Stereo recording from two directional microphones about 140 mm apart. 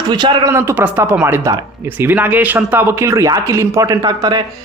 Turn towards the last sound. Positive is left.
turn(degrees=-30)  # may be behind; listen again after turning